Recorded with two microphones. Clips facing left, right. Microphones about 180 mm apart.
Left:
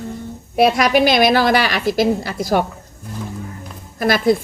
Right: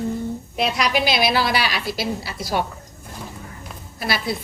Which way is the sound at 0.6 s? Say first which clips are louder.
Left 8 dB; 50° left (ahead or behind).